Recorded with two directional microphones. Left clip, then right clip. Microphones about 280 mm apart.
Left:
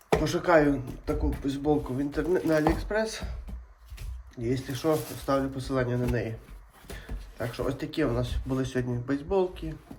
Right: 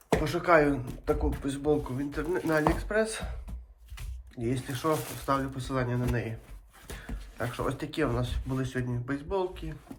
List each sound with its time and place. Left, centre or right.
0.3 s speech: centre
4.4 s speech: centre